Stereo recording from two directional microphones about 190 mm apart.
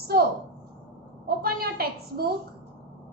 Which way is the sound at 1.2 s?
55° right (ahead or behind).